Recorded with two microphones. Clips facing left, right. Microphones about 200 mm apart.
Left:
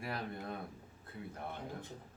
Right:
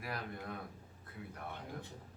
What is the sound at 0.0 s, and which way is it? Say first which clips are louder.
Speech: left 2 dB; 30° left (ahead or behind).